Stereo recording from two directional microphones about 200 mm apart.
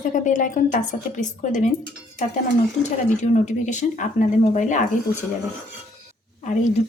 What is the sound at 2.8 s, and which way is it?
A woman's voice, 35° left (ahead or behind).